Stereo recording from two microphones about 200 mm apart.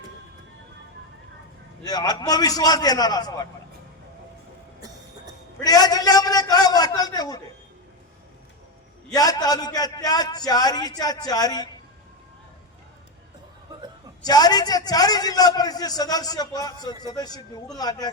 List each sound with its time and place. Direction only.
1.8 s a man's voice: 20° left (ahead or behind)
5.6 s a sound: 20° left (ahead or behind)
9.1 s a man's voice: 20° left (ahead or behind)
14.2 s a man's voice: 20° left (ahead or behind)